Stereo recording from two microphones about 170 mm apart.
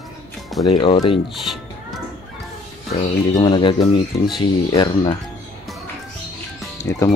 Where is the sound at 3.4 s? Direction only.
30° left (ahead or behind).